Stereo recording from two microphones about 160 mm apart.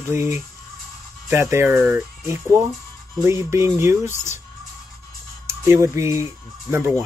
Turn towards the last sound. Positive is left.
turn(degrees=-15)  # may be behind; listen again after turning